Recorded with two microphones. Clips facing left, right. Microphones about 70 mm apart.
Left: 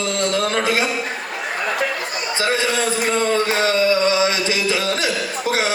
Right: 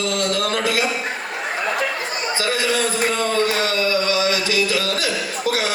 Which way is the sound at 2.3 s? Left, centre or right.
Left.